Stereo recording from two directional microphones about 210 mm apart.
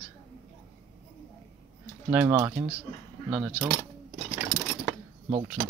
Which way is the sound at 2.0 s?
10° right (ahead or behind).